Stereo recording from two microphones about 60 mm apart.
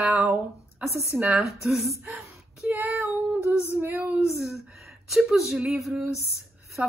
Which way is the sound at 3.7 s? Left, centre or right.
Right.